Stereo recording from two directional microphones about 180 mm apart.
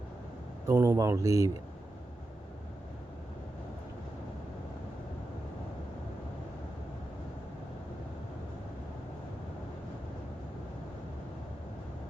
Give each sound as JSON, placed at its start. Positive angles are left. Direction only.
{"t": 0.7, "sound": "speech", "side_deg": -15}